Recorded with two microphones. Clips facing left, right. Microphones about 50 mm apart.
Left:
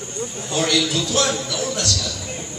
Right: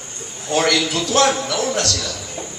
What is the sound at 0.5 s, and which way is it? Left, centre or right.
A man's voice, right.